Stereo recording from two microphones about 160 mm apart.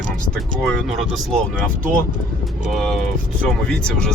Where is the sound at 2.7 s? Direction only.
Centre (ahead or behind).